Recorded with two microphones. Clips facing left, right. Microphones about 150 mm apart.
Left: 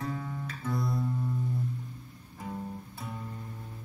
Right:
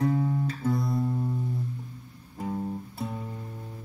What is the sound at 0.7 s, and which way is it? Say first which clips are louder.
Music: left 1 dB; centre (ahead or behind).